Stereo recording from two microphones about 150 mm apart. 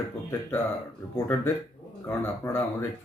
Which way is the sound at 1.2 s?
15° left (ahead or behind).